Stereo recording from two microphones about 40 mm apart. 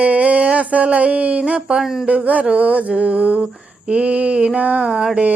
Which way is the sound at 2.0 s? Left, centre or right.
Right.